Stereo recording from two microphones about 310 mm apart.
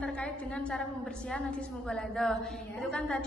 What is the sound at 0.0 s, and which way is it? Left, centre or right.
A woman's voice, centre.